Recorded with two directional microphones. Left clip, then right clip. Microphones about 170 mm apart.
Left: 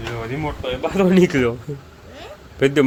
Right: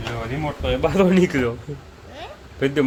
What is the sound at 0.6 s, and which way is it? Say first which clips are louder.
Speech: right 4 dB; 50° right (ahead or behind).